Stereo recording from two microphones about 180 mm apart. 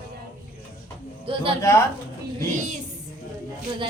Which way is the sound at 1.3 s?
30° right (ahead or behind).